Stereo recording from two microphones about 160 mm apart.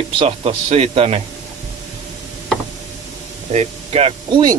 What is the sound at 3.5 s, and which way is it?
Speech, 40° right (ahead or behind).